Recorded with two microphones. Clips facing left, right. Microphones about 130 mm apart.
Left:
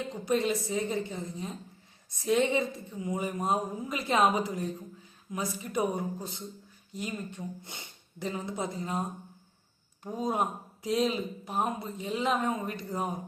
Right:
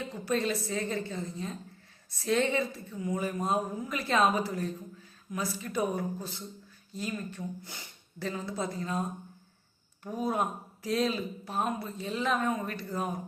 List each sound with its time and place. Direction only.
0.0 s a woman's voice: 15° left (ahead or behind)